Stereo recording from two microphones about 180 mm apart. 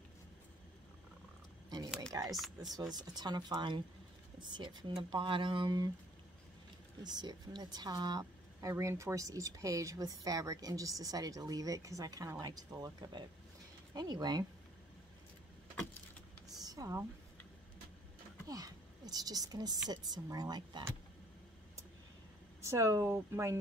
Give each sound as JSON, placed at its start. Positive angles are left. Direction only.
{"t": 2.1, "sound": "speech", "side_deg": -15}
{"t": 7.0, "sound": "speech", "side_deg": -25}
{"t": 16.6, "sound": "speech", "side_deg": -20}
{"t": 18.5, "sound": "a woman's voice", "side_deg": -20}
{"t": 22.6, "sound": "speech", "side_deg": -15}